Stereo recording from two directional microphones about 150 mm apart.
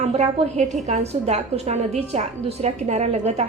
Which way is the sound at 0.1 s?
45° right (ahead or behind).